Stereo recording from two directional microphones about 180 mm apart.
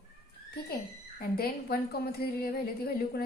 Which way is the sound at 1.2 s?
60° left (ahead or behind).